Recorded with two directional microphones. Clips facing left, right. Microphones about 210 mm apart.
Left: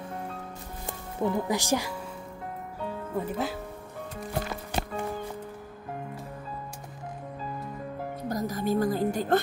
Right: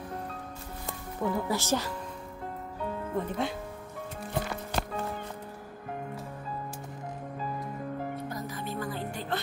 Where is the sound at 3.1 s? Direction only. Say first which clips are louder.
Left 1 dB; 5° left (ahead or behind).